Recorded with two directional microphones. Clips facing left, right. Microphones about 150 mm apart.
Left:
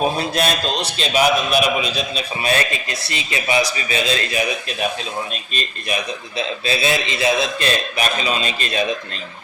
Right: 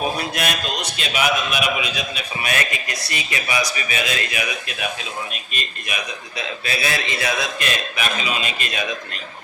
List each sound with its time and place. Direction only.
0.0 s a man's voice: 30° left (ahead or behind)
5.9 s a man's voice: 25° left (ahead or behind)